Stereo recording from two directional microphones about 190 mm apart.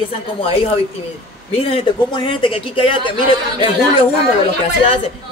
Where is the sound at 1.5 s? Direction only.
30° left (ahead or behind).